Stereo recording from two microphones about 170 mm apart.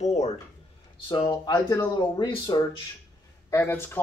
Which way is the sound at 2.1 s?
25° left (ahead or behind).